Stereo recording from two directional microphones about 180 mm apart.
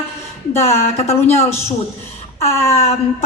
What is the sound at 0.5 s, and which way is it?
Speech, 35° left (ahead or behind).